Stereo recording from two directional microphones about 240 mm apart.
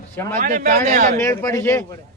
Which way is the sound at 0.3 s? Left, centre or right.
Right.